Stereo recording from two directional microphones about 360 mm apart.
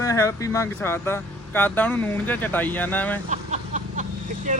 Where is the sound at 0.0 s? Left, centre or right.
Centre.